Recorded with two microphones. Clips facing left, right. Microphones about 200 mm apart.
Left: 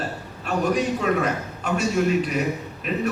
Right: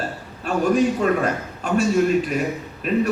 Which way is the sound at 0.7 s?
45° right (ahead or behind).